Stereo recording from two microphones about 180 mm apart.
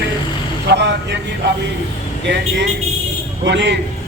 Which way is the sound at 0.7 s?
75° right (ahead or behind).